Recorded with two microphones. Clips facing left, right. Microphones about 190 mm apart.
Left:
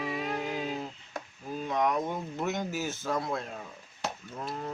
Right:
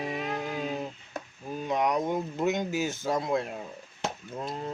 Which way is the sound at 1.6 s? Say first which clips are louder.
Right 2 dB; 15° right (ahead or behind).